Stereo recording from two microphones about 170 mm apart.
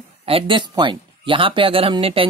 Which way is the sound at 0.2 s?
35° right (ahead or behind).